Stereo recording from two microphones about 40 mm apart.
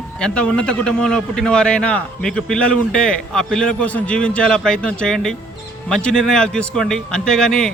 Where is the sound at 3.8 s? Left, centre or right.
Left.